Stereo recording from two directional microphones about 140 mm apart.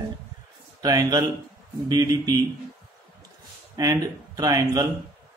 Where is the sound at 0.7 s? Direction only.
25° right (ahead or behind).